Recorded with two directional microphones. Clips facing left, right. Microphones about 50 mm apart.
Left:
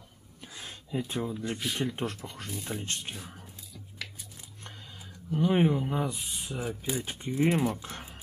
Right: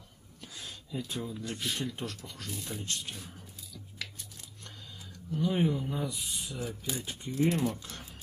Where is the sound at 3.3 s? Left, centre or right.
Left.